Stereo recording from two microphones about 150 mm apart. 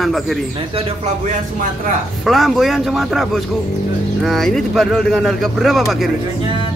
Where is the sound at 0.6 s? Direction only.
40° right (ahead or behind).